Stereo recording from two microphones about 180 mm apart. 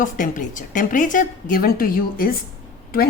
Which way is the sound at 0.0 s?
45° left (ahead or behind).